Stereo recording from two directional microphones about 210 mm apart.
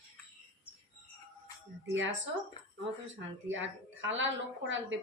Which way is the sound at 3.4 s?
65° right (ahead or behind).